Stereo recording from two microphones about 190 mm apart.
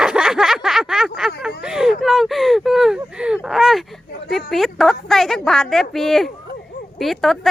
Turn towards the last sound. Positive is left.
turn(degrees=0)  # may be behind; listen again after turning